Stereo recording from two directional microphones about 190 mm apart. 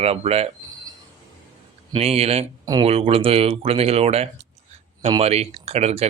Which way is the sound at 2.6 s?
20° right (ahead or behind).